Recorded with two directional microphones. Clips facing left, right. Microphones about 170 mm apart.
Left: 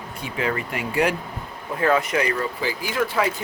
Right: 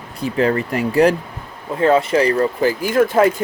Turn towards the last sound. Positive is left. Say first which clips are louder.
# right 9 dB
turn(degrees=-50)  # may be behind; listen again after turning